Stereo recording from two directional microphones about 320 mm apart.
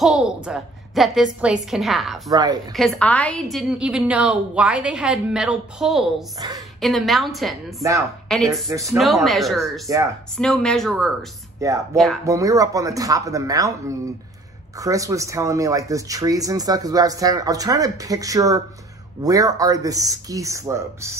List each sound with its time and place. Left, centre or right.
0.0 s a woman's voice: centre
2.3 s speech: centre
2.7 s a woman's voice: centre
8.6 s a woman's voice: centre
11.6 s speech: centre